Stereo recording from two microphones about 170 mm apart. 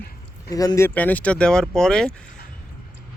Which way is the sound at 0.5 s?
20° left (ahead or behind).